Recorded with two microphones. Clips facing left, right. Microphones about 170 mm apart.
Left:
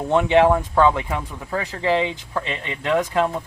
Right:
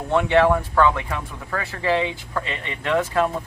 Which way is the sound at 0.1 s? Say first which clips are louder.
Left 1 dB; 20° left (ahead or behind).